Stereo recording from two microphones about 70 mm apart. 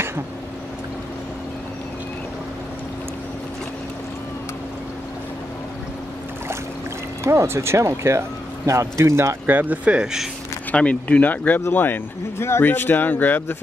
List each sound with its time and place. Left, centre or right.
7.2 s speech: right
9.6 s speech: right
10.7 s speech: centre